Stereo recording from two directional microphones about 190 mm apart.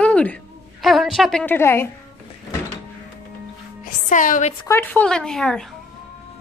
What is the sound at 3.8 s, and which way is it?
Music, 45° left (ahead or behind).